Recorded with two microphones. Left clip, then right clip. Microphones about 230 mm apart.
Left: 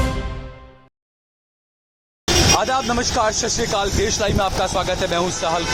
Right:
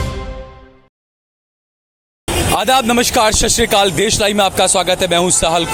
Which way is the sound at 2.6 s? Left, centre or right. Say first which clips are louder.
Right 7 dB; right.